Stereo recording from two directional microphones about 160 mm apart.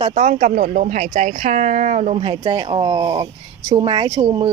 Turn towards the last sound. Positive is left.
turn(degrees=-30)  # may be behind; listen again after turning